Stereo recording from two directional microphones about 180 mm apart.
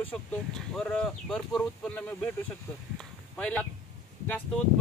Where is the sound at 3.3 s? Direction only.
5° left (ahead or behind).